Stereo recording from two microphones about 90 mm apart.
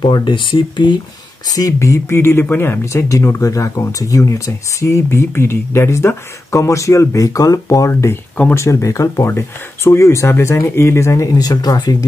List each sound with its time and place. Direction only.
0.0 s speech: 60° left (ahead or behind)
1.7 s speech: 30° left (ahead or behind)
11.3 s speech: 45° left (ahead or behind)